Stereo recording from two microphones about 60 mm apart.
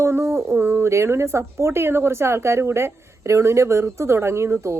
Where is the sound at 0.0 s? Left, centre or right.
Right.